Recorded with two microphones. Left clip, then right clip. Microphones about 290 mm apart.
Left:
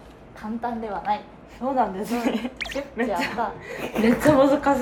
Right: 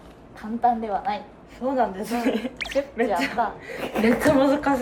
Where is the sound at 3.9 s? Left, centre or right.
Centre.